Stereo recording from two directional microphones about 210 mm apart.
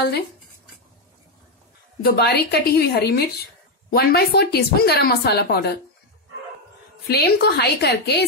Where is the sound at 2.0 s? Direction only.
50° left (ahead or behind).